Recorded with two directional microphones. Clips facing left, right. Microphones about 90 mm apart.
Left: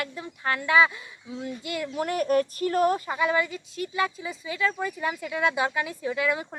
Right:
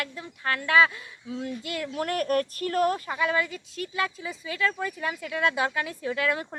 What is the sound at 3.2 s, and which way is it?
Speech, 15° left (ahead or behind).